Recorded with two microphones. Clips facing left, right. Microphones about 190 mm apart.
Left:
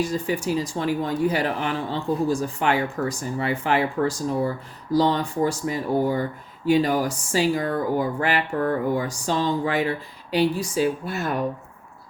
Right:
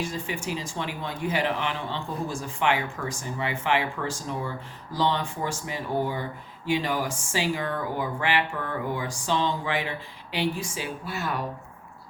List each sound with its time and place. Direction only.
0.0 s speech: 40° left (ahead or behind)